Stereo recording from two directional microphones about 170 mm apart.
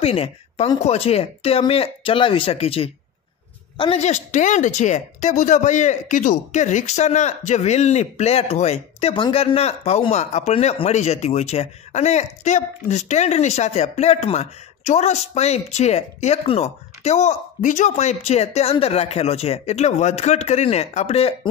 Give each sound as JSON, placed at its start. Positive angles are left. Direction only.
{"t": 0.0, "sound": "a man's voice", "side_deg": 35}
{"t": 4.0, "sound": "speech", "side_deg": 45}